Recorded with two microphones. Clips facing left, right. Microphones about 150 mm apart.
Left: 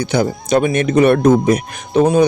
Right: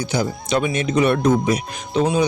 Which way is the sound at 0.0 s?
65° left (ahead or behind).